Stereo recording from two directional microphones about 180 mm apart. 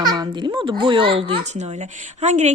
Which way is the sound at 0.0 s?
20° right (ahead or behind).